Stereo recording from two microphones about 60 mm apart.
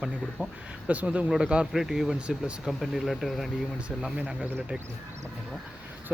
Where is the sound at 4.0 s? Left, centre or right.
Centre.